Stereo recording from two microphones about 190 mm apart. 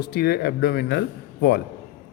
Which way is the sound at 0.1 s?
55° left (ahead or behind).